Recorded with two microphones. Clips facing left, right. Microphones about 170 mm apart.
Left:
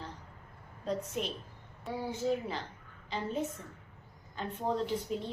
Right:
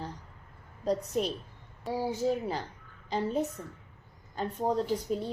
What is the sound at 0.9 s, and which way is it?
Speech, 40° right (ahead or behind).